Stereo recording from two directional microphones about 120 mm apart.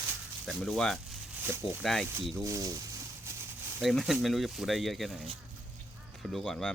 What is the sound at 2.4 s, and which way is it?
Speech, 25° right (ahead or behind).